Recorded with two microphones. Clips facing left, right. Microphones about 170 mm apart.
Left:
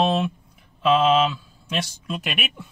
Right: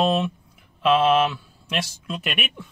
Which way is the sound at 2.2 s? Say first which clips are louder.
Even; centre (ahead or behind).